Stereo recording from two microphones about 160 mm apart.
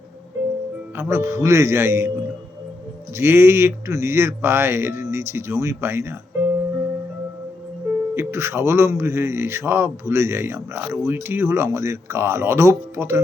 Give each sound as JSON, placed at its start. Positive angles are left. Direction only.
{"t": 0.9, "sound": "speech", "side_deg": -15}
{"t": 3.2, "sound": "speech", "side_deg": -15}
{"t": 8.1, "sound": "speech", "side_deg": -15}